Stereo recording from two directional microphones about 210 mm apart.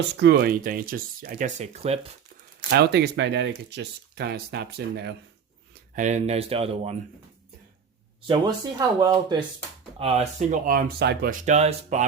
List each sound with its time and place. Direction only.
0.2 s speech: 50° right (ahead or behind); by 2.0 s 30° right (ahead or behind)
2.6 s speech: 50° right (ahead or behind)
5.9 s speech: 35° right (ahead or behind)
9.0 s speech: 15° right (ahead or behind)
10.0 s speech: 30° right (ahead or behind)
10.7 s speech: 45° right (ahead or behind)